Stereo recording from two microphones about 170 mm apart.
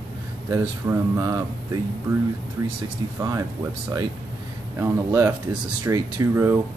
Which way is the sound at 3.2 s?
20° right (ahead or behind).